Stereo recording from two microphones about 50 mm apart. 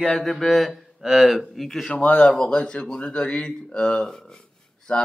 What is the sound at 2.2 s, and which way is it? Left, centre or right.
Speech, centre.